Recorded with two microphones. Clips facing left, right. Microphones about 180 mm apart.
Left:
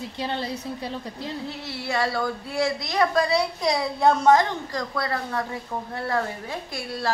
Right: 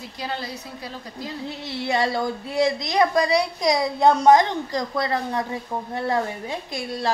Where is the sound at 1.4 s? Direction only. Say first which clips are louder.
Right 3 dB; 20° right (ahead or behind).